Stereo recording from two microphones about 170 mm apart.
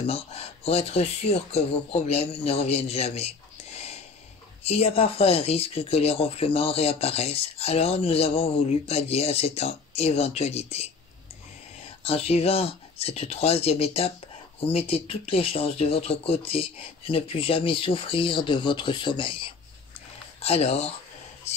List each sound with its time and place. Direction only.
0.0 s speech: 35° left (ahead or behind)
12.0 s speech: 35° left (ahead or behind)
21.5 s whispering: 40° left (ahead or behind)